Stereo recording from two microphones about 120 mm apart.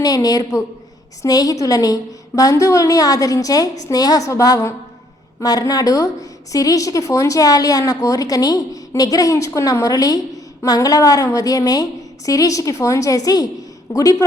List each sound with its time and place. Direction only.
0.0 s a woman's voice: 30° left (ahead or behind)